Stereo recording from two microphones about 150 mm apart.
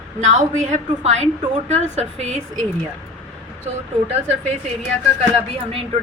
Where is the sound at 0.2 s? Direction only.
50° right (ahead or behind).